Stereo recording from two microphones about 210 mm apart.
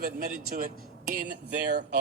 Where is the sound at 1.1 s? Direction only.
50° right (ahead or behind).